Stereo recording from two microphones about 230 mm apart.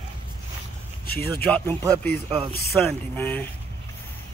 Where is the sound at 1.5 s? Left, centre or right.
Centre.